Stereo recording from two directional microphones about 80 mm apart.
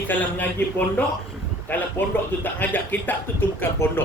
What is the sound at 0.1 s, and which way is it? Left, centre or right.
Speech, left.